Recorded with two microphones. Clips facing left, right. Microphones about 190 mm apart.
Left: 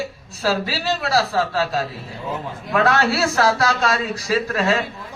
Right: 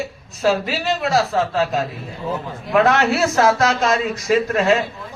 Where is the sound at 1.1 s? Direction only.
20° right (ahead or behind).